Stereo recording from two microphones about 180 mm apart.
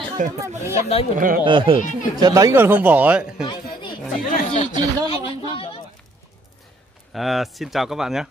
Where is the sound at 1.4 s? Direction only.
25° right (ahead or behind); by 3.4 s 5° right (ahead or behind).